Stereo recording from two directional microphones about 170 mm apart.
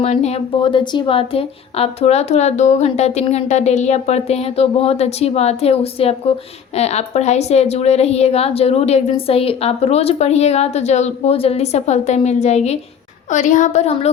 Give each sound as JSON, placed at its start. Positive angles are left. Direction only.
{"t": 0.0, "sound": "a woman's voice", "side_deg": 40}